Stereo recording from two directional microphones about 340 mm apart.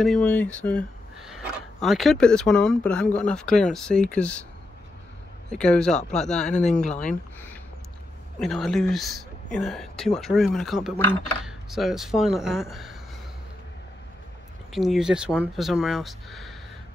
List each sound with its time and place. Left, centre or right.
0.0 s speech: centre
5.5 s speech: centre
8.4 s speech: centre
14.7 s speech: centre